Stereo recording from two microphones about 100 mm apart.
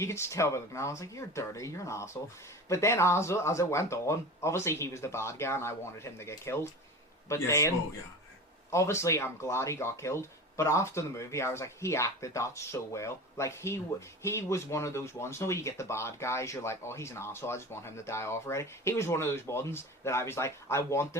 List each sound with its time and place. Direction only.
0.0 s speech: 30° left (ahead or behind)
8.7 s speech: 30° left (ahead or behind)